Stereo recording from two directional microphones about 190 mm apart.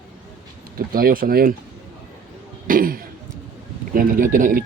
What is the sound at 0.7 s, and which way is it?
Speech, 50° right (ahead or behind).